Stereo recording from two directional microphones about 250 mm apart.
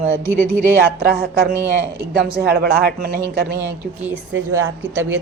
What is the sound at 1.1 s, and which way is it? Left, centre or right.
A man's voice, right.